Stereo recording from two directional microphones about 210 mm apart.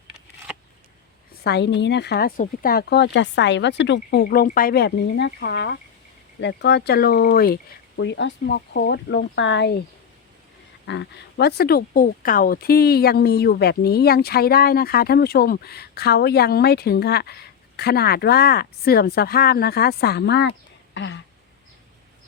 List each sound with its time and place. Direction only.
0.5 s a sound: 5° right (ahead or behind)
1.5 s speech: 55° left (ahead or behind)
10.8 s speech: 55° left (ahead or behind)